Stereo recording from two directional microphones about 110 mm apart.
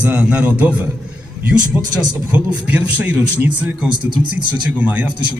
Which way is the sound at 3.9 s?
45° right (ahead or behind).